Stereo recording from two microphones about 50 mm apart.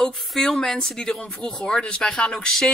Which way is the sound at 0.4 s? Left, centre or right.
Centre.